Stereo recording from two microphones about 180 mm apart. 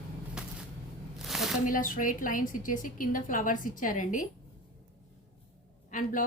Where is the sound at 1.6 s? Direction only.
50° left (ahead or behind).